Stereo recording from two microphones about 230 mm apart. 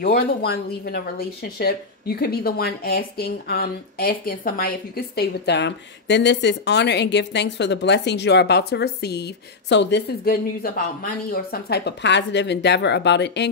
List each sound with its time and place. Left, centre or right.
0.0 s speech: left